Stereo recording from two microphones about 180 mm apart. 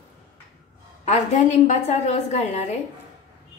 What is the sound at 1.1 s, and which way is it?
A woman's voice, 40° left (ahead or behind).